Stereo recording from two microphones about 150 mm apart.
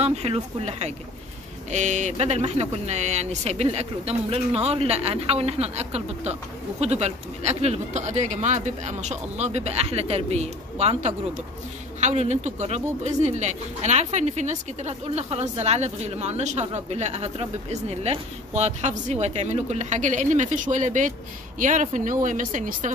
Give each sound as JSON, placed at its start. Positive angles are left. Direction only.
{"t": 0.0, "sound": "speech", "side_deg": -40}